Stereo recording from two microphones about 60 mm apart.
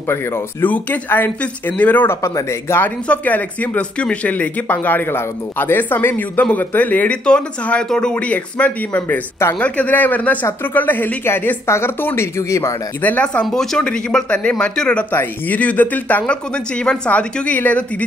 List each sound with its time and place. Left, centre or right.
0.1 s speech: left
0.7 s speech: left
1.4 s speech: left
2.0 s speech: left
3.1 s speech: left
4.7 s speech: left
7.2 s a man's voice: centre; by 12.3 s left
12.4 s speech: left
13.0 s speech: left
13.5 s a man's voice: centre
15.0 s speech: left